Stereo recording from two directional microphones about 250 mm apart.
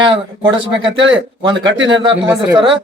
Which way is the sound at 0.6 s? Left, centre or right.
Right.